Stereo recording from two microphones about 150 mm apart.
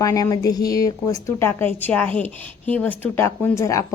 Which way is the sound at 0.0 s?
25° left (ahead or behind).